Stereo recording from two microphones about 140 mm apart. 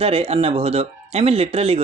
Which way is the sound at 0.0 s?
45° right (ahead or behind).